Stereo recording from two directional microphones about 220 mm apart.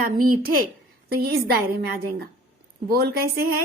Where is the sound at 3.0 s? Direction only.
45° right (ahead or behind).